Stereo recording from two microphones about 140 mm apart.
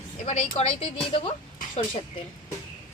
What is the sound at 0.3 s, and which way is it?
Speech, 50° left (ahead or behind).